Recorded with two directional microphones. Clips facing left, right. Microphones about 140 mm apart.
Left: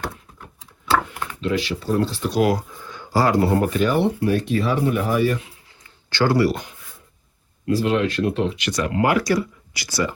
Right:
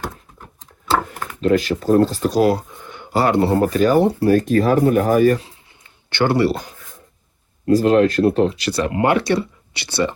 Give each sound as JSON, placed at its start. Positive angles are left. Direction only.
{"t": 0.0, "sound": "a sound", "side_deg": 0}
{"t": 1.4, "sound": "speech", "side_deg": -45}
{"t": 2.9, "sound": "speech", "side_deg": -25}
{"t": 6.1, "sound": "speech", "side_deg": -25}